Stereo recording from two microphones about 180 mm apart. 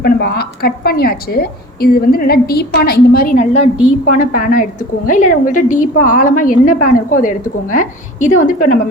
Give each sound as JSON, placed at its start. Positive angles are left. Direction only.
{"t": 0.0, "sound": "a woman's voice", "side_deg": 60}